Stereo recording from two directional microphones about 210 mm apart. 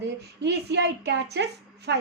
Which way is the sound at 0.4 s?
55° right (ahead or behind).